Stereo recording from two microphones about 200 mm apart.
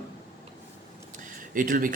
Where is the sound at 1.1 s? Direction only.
40° right (ahead or behind).